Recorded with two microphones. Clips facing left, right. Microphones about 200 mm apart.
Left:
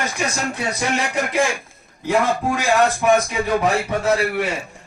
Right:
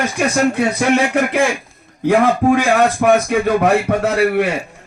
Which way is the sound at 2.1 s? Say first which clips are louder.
Right 6 dB; 55° right (ahead or behind).